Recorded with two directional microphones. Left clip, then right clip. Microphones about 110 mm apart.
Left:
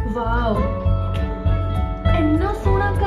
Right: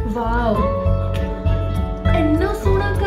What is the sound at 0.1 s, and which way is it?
Music, 10° right (ahead or behind).